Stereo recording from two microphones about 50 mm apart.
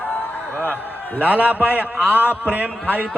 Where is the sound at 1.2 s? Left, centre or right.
Right.